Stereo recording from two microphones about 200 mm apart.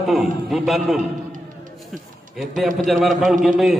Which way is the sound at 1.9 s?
Centre (ahead or behind).